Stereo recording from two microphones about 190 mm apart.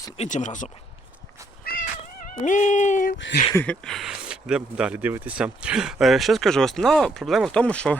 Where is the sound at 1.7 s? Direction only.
50° left (ahead or behind).